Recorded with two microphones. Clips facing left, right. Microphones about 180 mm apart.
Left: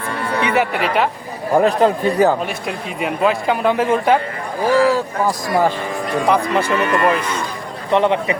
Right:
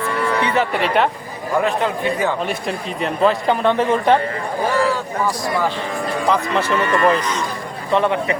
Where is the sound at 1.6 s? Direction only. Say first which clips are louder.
Left 5 dB; 40° left (ahead or behind).